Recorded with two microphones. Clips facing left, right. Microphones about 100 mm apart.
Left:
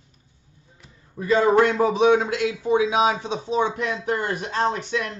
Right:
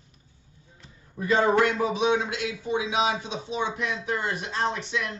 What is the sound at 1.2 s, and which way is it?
A man's voice, 30° left (ahead or behind).